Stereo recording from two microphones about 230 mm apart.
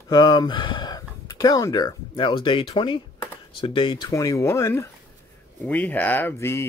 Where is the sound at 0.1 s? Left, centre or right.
Centre.